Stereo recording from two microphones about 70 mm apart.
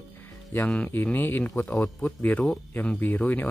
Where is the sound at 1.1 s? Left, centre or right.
Left.